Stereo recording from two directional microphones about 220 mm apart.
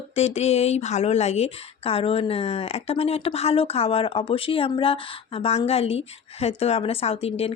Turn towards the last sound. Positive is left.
turn(degrees=25)  # may be behind; listen again after turning